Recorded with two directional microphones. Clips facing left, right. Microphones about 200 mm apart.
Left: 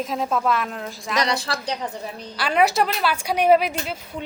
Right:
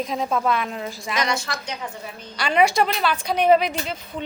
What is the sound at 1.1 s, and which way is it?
A woman's voice, 35° left (ahead or behind).